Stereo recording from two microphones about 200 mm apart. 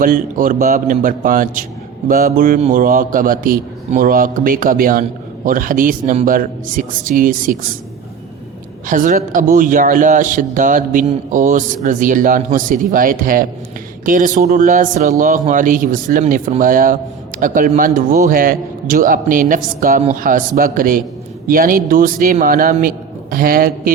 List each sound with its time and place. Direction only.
0.0 s a man's voice: 45° right (ahead or behind)
8.9 s a man's voice: 40° right (ahead or behind)